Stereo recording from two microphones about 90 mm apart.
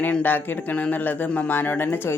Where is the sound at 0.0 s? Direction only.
20° left (ahead or behind).